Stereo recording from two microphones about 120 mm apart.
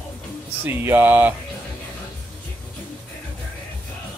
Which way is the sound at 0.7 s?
20° right (ahead or behind).